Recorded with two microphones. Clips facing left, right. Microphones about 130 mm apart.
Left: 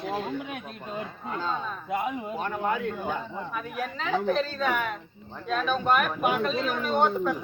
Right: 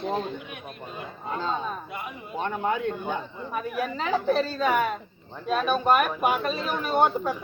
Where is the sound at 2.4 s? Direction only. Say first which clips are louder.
Right 3 dB; 5° left (ahead or behind).